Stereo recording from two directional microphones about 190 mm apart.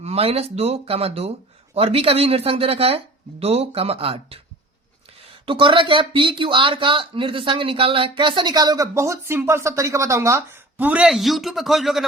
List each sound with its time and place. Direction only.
0.0 s speech: 30° right (ahead or behind)
5.5 s speech: 25° right (ahead or behind); by 12.0 s centre (ahead or behind)